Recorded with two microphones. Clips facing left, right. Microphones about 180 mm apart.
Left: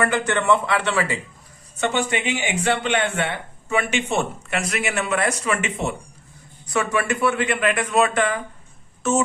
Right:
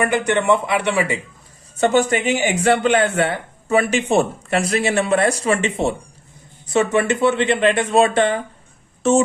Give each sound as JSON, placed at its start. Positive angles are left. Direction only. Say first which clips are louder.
{"t": 0.0, "sound": "a man's voice", "louder": "right 3 dB", "side_deg": -15}
{"t": 1.8, "sound": "speech", "louder": "right 6 dB", "side_deg": -40}